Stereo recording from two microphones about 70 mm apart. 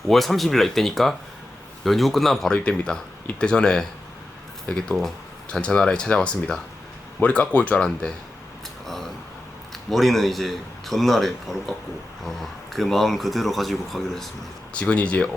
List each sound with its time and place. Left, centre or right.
0.1 s speech: centre
8.9 s a sound: centre
9.9 s speech: centre
14.7 s speech: centre